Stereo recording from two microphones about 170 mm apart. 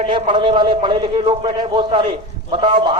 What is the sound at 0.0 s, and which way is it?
A man's voice, 30° right (ahead or behind).